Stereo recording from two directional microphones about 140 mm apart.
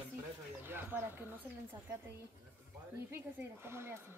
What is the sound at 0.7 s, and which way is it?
Speech, 15° right (ahead or behind).